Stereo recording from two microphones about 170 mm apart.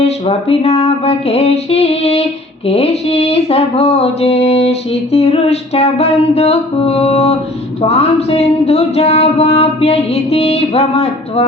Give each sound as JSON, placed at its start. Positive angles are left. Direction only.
{"t": 0.0, "sound": "mantra", "side_deg": 35}